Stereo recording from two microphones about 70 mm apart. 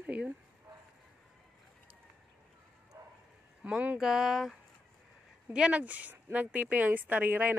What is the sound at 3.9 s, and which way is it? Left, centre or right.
Speech, centre.